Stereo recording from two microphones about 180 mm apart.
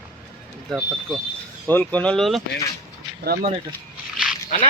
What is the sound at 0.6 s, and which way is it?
Speech, centre (ahead or behind).